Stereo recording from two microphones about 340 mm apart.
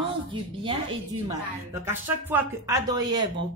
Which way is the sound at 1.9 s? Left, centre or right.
Centre.